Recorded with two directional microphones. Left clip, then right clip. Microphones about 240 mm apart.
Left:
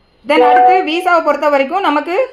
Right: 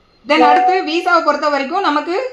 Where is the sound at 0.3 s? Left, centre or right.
Left.